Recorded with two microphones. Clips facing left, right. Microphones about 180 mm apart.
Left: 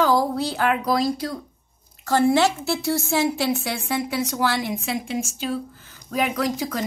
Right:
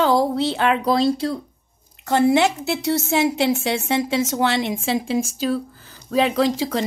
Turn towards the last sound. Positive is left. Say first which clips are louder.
# right 5 dB
turn(degrees=-25)  # may be behind; listen again after turning